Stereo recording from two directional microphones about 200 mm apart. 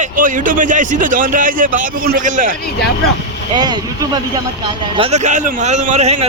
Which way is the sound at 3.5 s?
20° right (ahead or behind).